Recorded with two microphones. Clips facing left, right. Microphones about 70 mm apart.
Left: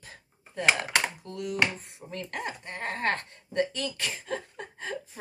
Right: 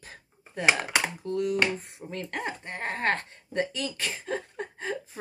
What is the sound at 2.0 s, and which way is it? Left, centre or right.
Speech, centre.